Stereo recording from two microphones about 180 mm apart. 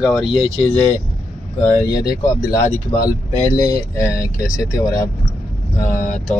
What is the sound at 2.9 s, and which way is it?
Speech, 20° left (ahead or behind).